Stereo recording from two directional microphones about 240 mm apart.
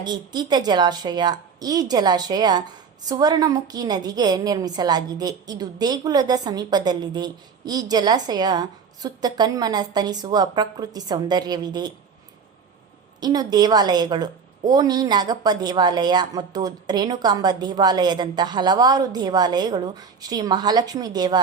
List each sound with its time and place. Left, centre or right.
0.0 s a woman's voice: centre
13.1 s a woman's voice: centre